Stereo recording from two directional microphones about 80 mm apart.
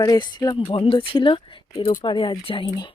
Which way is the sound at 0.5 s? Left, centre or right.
Left.